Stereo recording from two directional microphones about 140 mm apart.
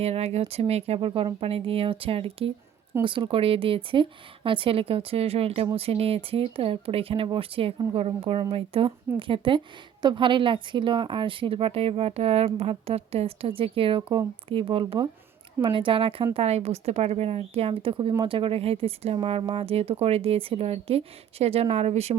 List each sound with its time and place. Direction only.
0.0 s speech: 50° right (ahead or behind)